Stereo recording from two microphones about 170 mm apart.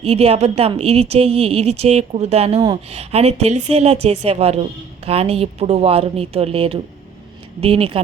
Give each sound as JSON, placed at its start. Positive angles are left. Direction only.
{"t": 0.0, "sound": "a woman's voice", "side_deg": -40}